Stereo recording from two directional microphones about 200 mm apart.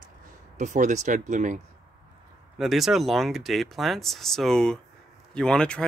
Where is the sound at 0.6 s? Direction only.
40° right (ahead or behind).